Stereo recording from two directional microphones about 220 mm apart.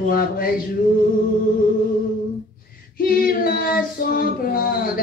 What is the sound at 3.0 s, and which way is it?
Female singing, 40° left (ahead or behind).